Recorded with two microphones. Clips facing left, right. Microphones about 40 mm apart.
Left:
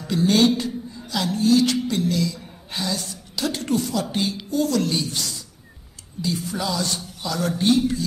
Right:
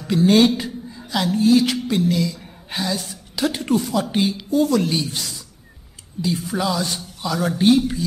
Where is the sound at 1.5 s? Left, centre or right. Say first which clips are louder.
Even; centre.